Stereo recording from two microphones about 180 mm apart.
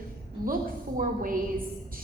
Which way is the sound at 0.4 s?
50° right (ahead or behind).